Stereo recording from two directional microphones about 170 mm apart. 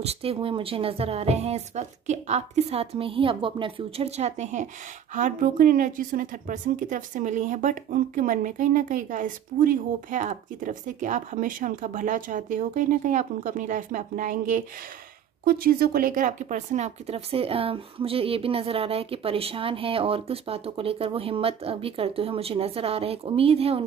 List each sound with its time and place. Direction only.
0.0 s a woman's voice: 35° right (ahead or behind)